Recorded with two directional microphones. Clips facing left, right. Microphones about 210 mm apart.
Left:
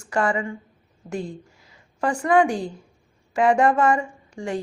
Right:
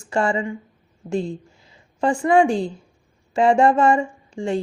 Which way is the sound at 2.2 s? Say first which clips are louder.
Right 2 dB; 25° right (ahead or behind).